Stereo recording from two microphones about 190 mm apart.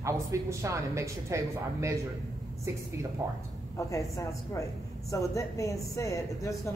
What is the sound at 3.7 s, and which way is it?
Speech, 15° left (ahead or behind).